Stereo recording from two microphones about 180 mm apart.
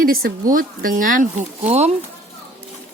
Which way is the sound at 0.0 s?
55° right (ahead or behind).